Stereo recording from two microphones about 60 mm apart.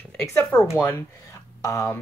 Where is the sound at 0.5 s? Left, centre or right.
Left.